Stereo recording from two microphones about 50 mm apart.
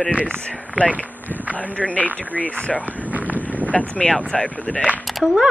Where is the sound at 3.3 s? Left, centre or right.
Left.